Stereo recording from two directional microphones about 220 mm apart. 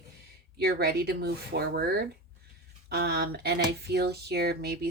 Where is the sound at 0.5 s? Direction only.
45° right (ahead or behind).